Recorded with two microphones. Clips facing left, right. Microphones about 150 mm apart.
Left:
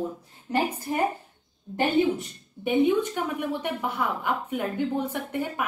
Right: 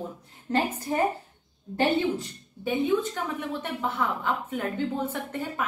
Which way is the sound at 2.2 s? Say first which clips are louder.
Left 1 dB; 20° left (ahead or behind).